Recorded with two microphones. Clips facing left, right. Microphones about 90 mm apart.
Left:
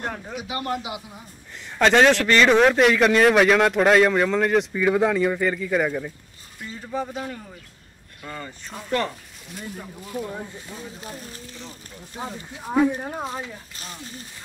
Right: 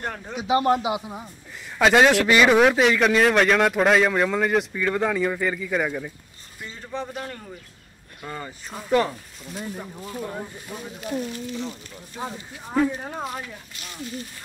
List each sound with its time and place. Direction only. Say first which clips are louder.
0.3 s a man's voice: right 11 dB; 25° right (ahead or behind)
1.8 s a man's voice: even; 5° right (ahead or behind)
8.2 s speech: right 1 dB; 15° right (ahead or behind)
10.7 s speech: right 2 dB; 15° right (ahead or behind)
12.2 s speech: right 1 dB; 20° left (ahead or behind)
12.6 s speech: left 2 dB; 5° left (ahead or behind)
13.2 s speech: left 1 dB; 25° left (ahead or behind)